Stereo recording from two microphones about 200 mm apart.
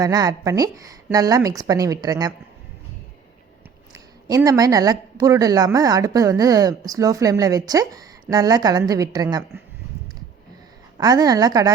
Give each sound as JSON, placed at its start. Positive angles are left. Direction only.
{"t": 0.0, "sound": "speech", "side_deg": -20}
{"t": 4.3, "sound": "speech", "side_deg": -15}
{"t": 10.9, "sound": "a woman's voice", "side_deg": -20}